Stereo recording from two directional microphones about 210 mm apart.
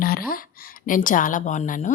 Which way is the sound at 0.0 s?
45° left (ahead or behind).